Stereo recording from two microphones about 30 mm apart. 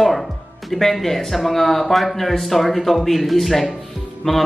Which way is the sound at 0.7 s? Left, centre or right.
Centre.